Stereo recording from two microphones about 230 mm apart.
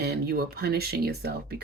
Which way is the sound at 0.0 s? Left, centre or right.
Right.